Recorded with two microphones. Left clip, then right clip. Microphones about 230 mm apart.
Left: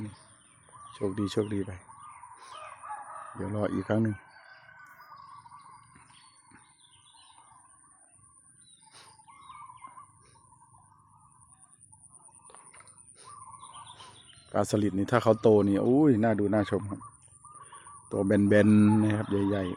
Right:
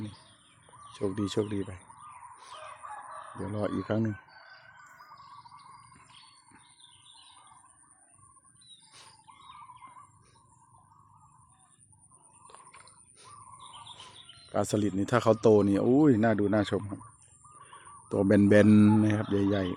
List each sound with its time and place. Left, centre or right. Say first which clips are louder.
0.8 s speech: even; centre
2.8 s chicken: left 3 dB; right
3.4 s speech: left 2 dB; centre
12.7 s a sound: right 1 dB; centre
13.9 s fowl: right 2 dB; centre
14.5 s speech: left 1 dB; centre
18.1 s speech: right 2 dB; centre